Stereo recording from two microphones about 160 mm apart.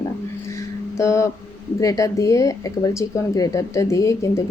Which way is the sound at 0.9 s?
20° left (ahead or behind).